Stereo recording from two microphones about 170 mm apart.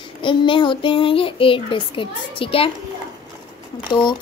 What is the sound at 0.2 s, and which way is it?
A child's voice, 30° left (ahead or behind).